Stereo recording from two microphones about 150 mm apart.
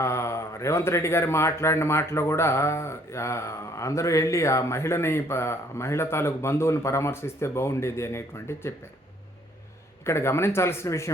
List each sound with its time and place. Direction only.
0.0 s speech: 20° left (ahead or behind)
10.1 s speech: 15° left (ahead or behind)